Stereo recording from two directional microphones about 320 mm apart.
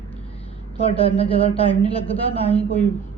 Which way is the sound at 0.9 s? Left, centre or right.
Centre.